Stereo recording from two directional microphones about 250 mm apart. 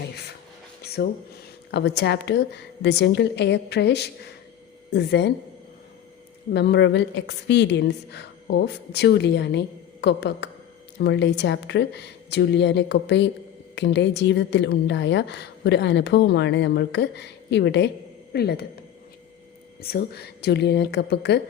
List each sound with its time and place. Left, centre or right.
0.8 s a sound: left
2.0 s a woman's voice: left
6.5 s a woman's voice: left
19.8 s a woman's voice: left